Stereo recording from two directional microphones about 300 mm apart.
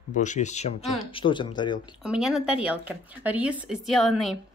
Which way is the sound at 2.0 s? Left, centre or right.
Centre.